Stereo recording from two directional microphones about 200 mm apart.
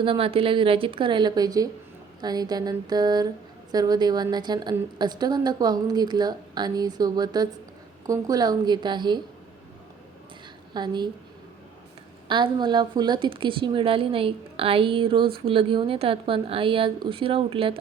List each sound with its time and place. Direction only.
0.0 s speech: 25° right (ahead or behind)
10.8 s speech: 20° right (ahead or behind)
12.3 s speech: 25° right (ahead or behind)